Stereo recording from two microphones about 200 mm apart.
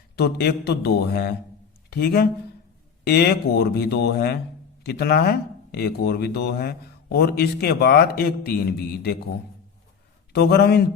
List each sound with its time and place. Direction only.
0.2 s speech: 55° left (ahead or behind)
10.3 s speech: 55° left (ahead or behind)